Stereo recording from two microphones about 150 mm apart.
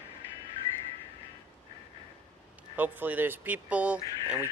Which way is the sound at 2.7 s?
10° right (ahead or behind).